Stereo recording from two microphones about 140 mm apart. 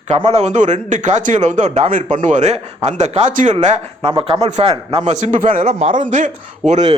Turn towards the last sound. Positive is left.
turn(degrees=-50)  # may be behind; listen again after turning